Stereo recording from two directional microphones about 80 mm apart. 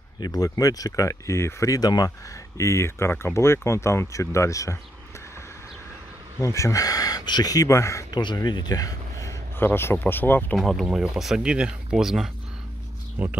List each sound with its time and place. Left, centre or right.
0.2 s speech: left
2.5 s speech: left
6.4 s speech: left
8.1 s speech: left
9.6 s speech: left
10.5 s speech: centre
13.2 s speech: right